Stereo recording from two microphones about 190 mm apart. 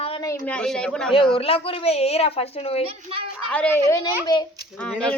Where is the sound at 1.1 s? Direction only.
30° left (ahead or behind).